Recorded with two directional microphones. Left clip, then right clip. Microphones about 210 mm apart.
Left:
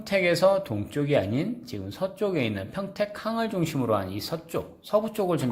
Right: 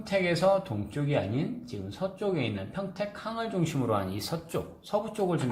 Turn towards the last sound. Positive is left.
turn(degrees=25)  # may be behind; listen again after turning